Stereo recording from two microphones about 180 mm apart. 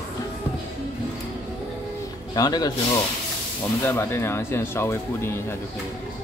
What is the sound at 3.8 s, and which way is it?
Speech, 15° left (ahead or behind).